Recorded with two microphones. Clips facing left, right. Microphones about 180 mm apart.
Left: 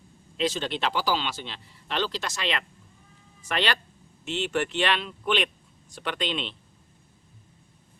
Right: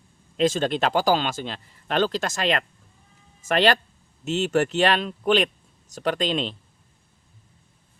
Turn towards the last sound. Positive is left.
turn(degrees=-40)  # may be behind; listen again after turning